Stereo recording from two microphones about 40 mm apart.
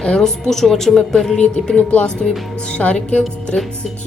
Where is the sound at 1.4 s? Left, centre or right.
Left.